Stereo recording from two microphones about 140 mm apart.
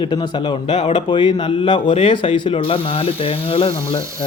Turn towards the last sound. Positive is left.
turn(degrees=40)  # may be behind; listen again after turning